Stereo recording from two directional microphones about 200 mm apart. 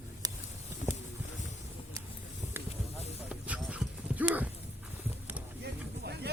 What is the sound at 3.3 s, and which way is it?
Clip-clop, 5° right (ahead or behind).